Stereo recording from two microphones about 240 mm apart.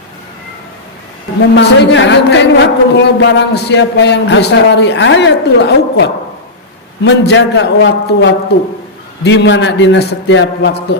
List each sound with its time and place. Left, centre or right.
1.5 s a woman's voice: left